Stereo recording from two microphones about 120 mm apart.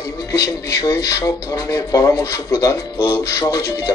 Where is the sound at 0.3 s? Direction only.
25° left (ahead or behind).